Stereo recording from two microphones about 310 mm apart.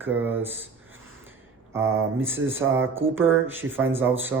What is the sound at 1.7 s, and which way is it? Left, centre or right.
Speech, centre.